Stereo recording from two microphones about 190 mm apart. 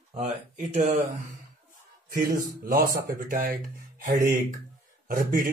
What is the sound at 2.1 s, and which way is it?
A man's voice, 50° right (ahead or behind).